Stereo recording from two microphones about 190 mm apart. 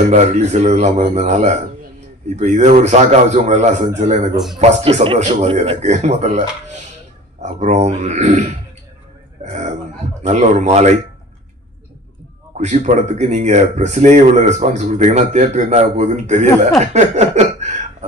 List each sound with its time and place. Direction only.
0.1 s a man's voice: 35° right (ahead or behind)
12.5 s speech: 40° right (ahead or behind)
16.8 s a sound: 35° right (ahead or behind)